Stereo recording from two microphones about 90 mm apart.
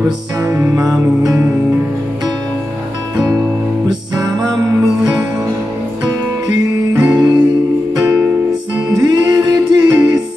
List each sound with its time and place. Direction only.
0.5 s music: 30° right (ahead or behind)
0.8 s music: 45° right (ahead or behind)
6.9 s music: 45° right (ahead or behind)